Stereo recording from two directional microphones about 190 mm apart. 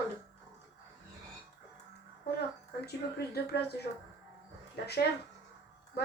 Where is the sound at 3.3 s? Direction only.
60° left (ahead or behind).